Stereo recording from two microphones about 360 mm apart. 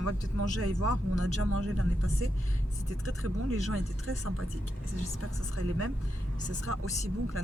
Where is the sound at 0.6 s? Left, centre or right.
Right.